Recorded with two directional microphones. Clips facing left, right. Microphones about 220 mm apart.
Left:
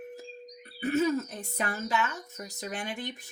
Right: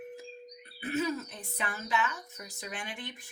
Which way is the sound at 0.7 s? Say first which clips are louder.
Left 6 dB; 40° left (ahead or behind).